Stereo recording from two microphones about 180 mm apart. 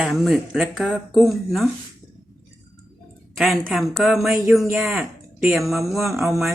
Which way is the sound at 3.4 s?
Centre (ahead or behind).